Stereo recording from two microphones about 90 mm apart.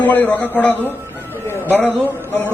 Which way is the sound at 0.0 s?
20° left (ahead or behind).